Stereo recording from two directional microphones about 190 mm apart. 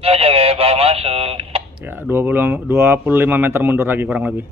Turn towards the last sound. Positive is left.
turn(degrees=-10)  # may be behind; listen again after turning